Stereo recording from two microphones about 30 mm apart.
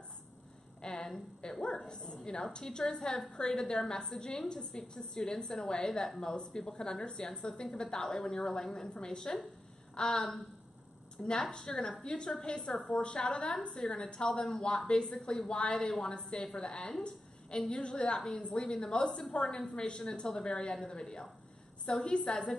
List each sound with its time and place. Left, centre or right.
0.8 s a sound: left
1.4 s dog: left
1.9 s a woman's voice: left; by 6.3 s centre
6.3 s a woman's voice: left
8.9 s a woman's voice: left
11.5 s a woman's voice: left